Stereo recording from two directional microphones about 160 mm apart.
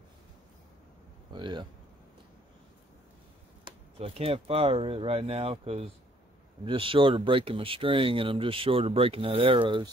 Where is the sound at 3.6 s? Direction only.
35° right (ahead or behind).